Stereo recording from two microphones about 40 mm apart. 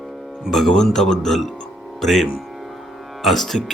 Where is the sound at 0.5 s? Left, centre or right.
Centre.